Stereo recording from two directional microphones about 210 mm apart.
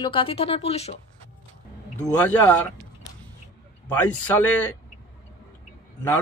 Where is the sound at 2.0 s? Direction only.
5° left (ahead or behind).